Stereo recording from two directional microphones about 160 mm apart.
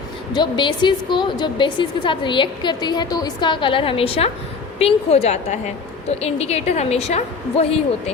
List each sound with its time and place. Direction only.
0.3 s a woman's voice: 30° left (ahead or behind)